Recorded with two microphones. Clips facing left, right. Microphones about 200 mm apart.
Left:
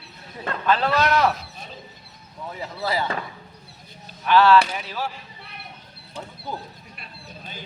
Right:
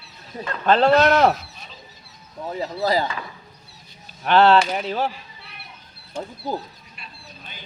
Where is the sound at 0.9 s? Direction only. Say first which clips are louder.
Right 7 dB; 50° right (ahead or behind).